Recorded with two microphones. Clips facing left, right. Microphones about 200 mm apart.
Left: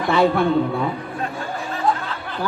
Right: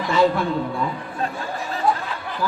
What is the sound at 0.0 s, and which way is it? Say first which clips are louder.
Speech: left 1 dB; 60° left (ahead or behind).